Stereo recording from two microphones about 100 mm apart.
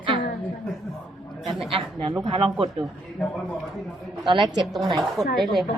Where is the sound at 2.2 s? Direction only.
65° right (ahead or behind).